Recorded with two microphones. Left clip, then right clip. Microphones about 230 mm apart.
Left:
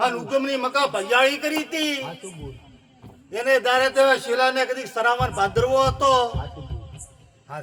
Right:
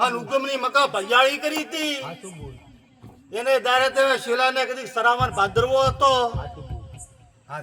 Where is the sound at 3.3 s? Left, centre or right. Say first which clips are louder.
Left 1 dB; centre.